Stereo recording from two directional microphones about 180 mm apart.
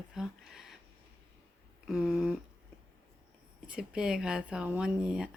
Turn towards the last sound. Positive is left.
turn(degrees=-5)  # may be behind; listen again after turning